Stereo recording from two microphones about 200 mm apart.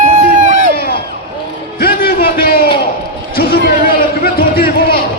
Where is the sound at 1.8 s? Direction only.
50° left (ahead or behind).